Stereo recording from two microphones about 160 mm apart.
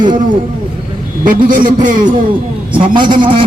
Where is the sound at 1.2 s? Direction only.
55° right (ahead or behind).